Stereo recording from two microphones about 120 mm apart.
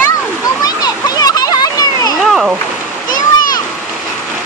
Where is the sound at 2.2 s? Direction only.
Centre (ahead or behind).